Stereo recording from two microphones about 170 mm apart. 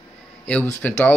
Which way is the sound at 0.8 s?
10° left (ahead or behind).